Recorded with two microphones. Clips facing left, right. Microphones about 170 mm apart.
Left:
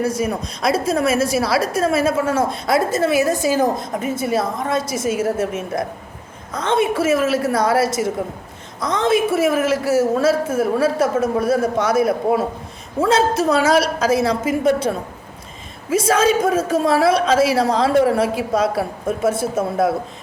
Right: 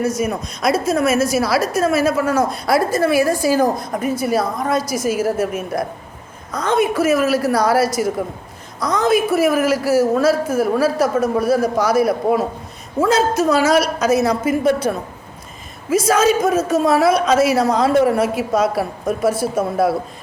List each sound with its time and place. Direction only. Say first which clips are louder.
0.0 s a woman's voice: right 1 dB; 30° left (ahead or behind)
15.9 s a woman's voice: right 1 dB; 30° left (ahead or behind)